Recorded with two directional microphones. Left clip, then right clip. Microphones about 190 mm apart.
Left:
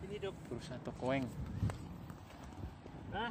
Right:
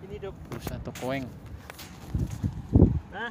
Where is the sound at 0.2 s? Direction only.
30° right (ahead or behind).